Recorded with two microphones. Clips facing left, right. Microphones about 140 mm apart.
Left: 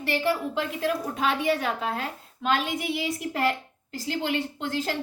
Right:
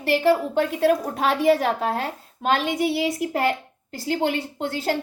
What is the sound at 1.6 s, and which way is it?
A child's voice, 40° right (ahead or behind).